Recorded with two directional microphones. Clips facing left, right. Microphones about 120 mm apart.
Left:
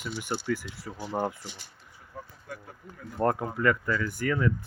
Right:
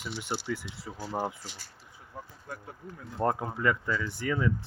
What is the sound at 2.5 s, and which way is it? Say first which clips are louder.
Speech: right 1 dB; 30° right (ahead or behind).